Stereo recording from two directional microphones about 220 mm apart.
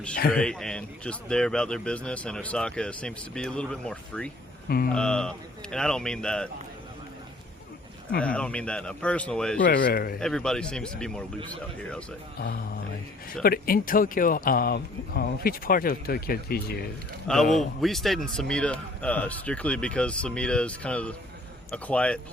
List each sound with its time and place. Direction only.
0.3 s speech: 5° left (ahead or behind)
8.2 s speech: 5° left (ahead or behind)
9.6 s speech: 40° left (ahead or behind)
10.2 s speech: 5° left (ahead or behind)
12.4 s speech: 45° left (ahead or behind)
17.2 s speech: centre (ahead or behind)